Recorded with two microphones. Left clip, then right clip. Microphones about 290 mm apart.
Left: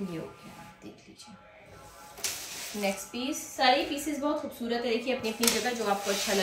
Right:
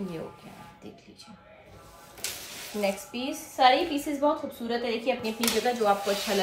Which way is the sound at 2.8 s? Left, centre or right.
Centre.